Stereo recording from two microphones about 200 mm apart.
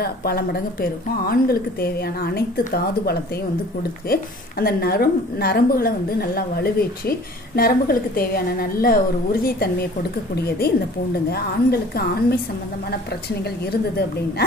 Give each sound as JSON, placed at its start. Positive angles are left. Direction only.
{"t": 0.0, "sound": "a woman's voice", "side_deg": 50}
{"t": 11.2, "sound": "a woman's voice", "side_deg": 50}
{"t": 13.4, "sound": "a woman's voice", "side_deg": 55}